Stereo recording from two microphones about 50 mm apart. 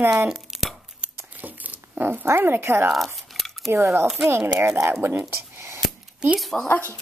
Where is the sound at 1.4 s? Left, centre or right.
Right.